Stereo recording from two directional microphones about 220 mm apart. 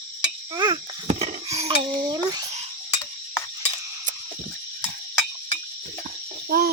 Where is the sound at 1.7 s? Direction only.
20° right (ahead or behind).